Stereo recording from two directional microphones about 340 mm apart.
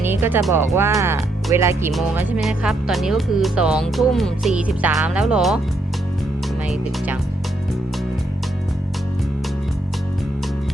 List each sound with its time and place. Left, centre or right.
0.0 s speech: centre